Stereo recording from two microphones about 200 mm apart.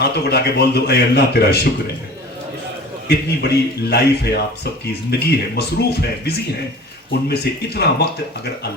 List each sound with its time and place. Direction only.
0.0 s a man's voice: 55° left (ahead or behind)
3.1 s a man's voice: 55° left (ahead or behind)